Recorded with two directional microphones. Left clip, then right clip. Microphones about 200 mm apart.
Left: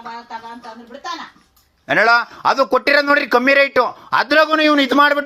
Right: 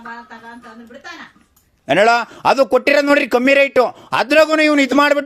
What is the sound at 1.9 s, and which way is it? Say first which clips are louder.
A man's voice: right 1 dB; 50° right (ahead or behind).